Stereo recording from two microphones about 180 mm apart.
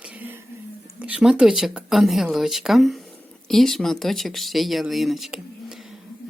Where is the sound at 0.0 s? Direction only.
10° right (ahead or behind).